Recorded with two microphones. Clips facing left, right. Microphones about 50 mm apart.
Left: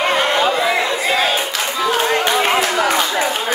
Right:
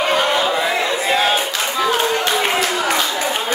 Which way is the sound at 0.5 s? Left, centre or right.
Centre.